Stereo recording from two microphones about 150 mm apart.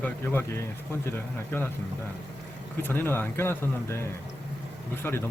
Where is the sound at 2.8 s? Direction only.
15° left (ahead or behind).